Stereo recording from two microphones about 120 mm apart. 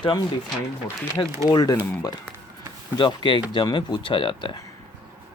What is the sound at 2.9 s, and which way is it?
Speech, 40° left (ahead or behind).